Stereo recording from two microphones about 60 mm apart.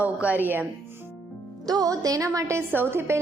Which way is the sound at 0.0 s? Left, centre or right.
Right.